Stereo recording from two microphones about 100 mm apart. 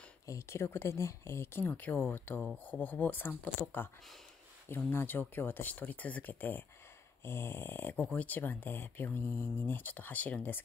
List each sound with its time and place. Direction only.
0.3 s speech: 30° left (ahead or behind)